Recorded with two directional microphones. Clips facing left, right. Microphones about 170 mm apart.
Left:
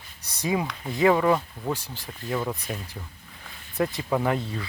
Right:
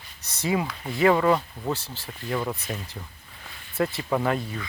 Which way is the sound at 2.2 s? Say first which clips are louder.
Even; centre (ahead or behind).